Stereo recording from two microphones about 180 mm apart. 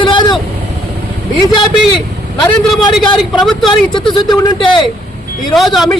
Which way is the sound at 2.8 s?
25° left (ahead or behind).